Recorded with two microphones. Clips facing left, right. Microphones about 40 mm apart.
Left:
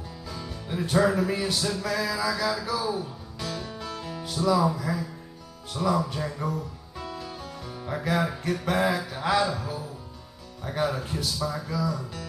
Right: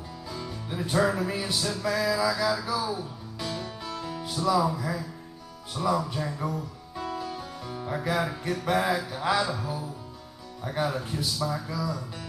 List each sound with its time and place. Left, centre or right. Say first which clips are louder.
0.5 s music: left 3 dB; centre
3.3 s music: even; centre
4.2 s music: left 1 dB; centre
5.8 s music: left 1 dB; centre